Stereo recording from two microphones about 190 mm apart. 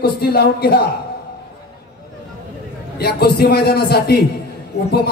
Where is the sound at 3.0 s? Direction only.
55° left (ahead or behind).